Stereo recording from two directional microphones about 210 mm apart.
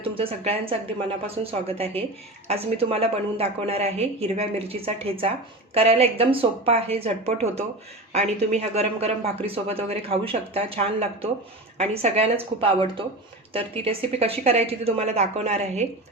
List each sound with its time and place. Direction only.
0.0 s a woman's voice: 25° right (ahead or behind)